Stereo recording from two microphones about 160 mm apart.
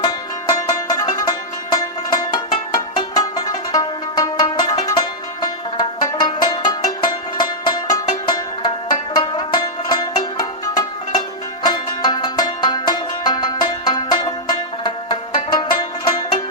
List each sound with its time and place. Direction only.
0.0 s music: 25° left (ahead or behind)